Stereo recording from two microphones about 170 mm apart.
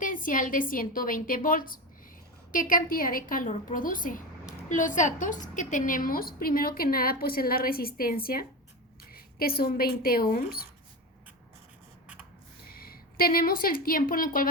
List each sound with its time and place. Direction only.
0.0 s a woman's voice: 55° left (ahead or behind)
12.6 s a woman's voice: 60° left (ahead or behind)